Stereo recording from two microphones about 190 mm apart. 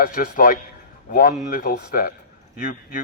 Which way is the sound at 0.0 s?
45° left (ahead or behind).